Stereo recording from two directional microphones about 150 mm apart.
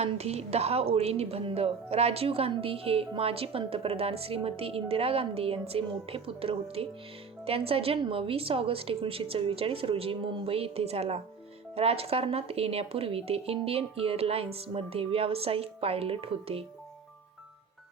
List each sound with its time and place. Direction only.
0.0 s speech: 45° right (ahead or behind)